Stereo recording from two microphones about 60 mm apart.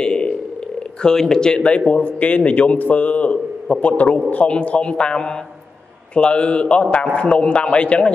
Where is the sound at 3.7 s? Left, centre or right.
Centre.